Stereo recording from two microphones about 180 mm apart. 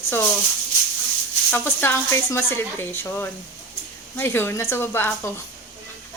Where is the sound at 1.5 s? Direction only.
10° left (ahead or behind).